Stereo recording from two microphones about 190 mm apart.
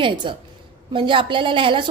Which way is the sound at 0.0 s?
25° right (ahead or behind).